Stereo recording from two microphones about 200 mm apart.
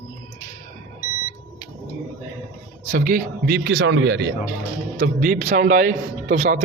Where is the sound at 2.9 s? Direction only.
45° right (ahead or behind).